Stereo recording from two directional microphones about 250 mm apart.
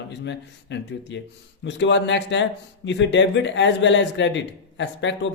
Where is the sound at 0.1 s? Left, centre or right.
Left.